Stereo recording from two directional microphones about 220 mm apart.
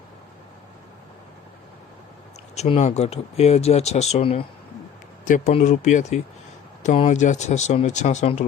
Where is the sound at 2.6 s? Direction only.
30° left (ahead or behind).